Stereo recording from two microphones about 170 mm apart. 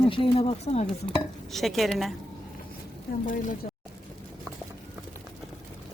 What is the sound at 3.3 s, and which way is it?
Speech, 50° left (ahead or behind).